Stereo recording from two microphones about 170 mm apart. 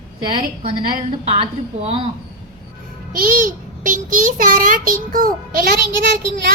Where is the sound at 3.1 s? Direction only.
55° right (ahead or behind).